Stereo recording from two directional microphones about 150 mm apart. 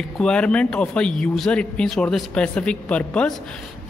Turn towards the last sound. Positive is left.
turn(degrees=10)  # may be behind; listen again after turning